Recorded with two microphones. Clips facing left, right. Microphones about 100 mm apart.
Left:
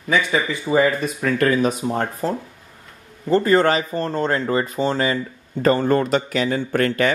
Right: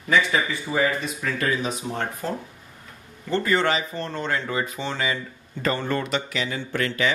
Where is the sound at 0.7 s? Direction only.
50° left (ahead or behind).